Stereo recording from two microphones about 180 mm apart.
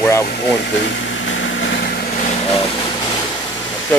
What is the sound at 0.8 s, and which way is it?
Vehicle, 90° left.